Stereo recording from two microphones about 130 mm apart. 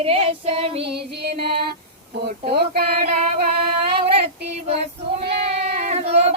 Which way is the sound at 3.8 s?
50° right (ahead or behind).